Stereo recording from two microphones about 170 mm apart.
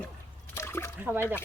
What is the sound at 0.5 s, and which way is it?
Splash, 15° left (ahead or behind).